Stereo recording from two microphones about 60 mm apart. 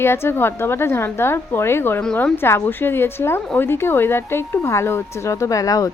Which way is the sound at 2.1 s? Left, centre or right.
Left.